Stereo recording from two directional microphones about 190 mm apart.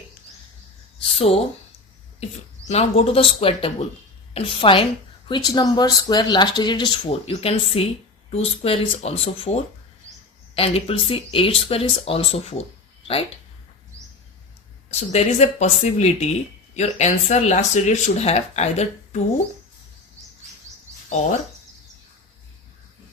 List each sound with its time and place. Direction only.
1.2 s speech: 30° left (ahead or behind)
2.6 s speech: 35° left (ahead or behind)
14.8 s speech: 35° left (ahead or behind)